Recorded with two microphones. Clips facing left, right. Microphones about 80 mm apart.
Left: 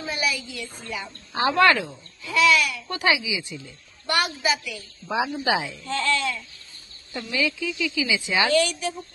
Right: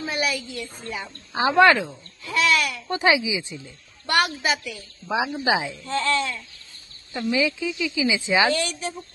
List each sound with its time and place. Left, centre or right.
0.0 s a sound: right
1.3 s speech: centre
2.3 s speech: right
2.9 s a woman's voice: right
4.1 s speech: right
5.1 s speech: centre
5.9 s speech: right
7.2 s a woman's voice: centre
8.5 s speech: right